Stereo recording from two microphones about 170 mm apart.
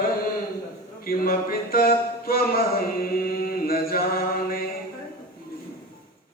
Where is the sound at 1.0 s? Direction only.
60° left (ahead or behind).